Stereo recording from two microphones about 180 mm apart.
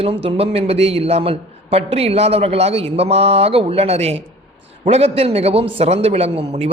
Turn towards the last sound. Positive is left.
turn(degrees=-35)  # may be behind; listen again after turning